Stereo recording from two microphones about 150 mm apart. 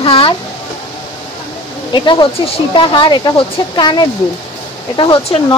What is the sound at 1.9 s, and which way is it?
Speech, 30° left (ahead or behind).